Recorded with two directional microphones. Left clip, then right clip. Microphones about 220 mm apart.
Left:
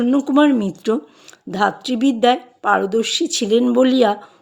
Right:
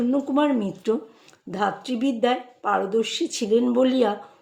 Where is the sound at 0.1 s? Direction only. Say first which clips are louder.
Left 8 dB; 40° left (ahead or behind).